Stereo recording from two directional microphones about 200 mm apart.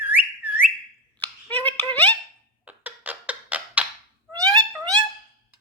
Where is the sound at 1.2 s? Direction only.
10° left (ahead or behind).